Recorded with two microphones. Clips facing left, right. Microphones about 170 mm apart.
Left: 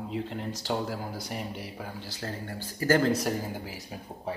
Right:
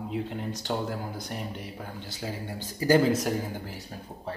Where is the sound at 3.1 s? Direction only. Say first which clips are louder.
Right 1 dB; centre (ahead or behind).